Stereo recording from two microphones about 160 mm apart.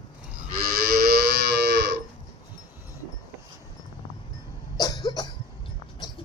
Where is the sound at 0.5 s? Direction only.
65° right (ahead or behind); by 2.0 s 90° right.